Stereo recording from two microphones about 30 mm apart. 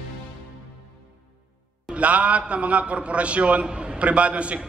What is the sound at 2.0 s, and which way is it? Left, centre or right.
A man's voice, right.